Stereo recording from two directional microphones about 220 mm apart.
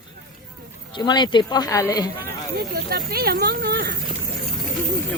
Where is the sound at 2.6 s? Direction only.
45° right (ahead or behind).